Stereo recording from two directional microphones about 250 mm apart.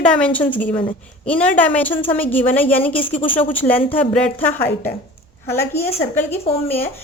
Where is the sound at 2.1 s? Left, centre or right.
Centre.